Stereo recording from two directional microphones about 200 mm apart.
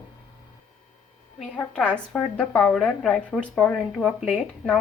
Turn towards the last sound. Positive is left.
turn(degrees=0)  # may be behind; listen again after turning